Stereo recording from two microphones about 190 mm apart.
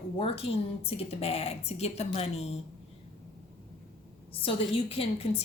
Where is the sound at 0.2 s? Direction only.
30° left (ahead or behind).